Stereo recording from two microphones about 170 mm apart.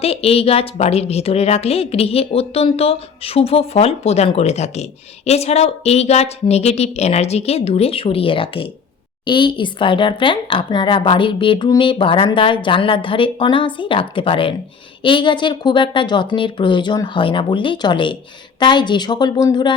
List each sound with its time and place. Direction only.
0.0 s a woman's voice: 35° left (ahead or behind)